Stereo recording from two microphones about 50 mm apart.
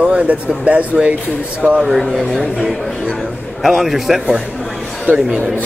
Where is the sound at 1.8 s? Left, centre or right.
Centre.